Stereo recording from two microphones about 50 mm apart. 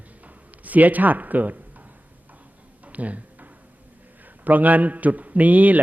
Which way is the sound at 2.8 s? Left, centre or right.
Right.